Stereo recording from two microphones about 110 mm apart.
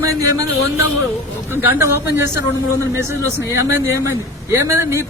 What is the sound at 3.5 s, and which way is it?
Speech, 25° right (ahead or behind).